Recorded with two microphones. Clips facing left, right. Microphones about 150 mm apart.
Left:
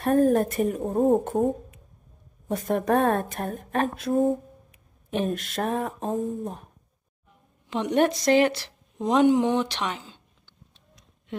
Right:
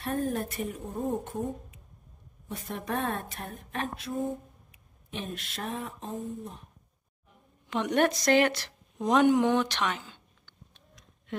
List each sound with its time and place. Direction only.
0.0 s speech: 55° left (ahead or behind)
3.3 s speech: 50° left (ahead or behind)
7.7 s speech: 30° left (ahead or behind)